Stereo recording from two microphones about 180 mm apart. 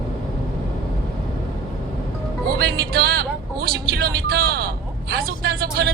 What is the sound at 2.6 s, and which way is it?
Speech, 60° right (ahead or behind).